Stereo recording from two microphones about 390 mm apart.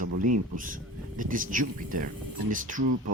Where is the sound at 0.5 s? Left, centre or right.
Right.